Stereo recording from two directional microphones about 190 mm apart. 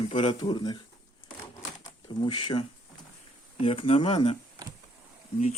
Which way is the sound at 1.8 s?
25° left (ahead or behind).